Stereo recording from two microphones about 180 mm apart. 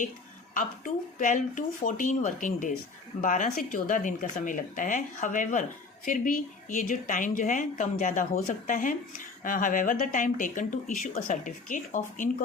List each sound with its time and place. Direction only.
1.2 s a woman's voice: 45° left (ahead or behind)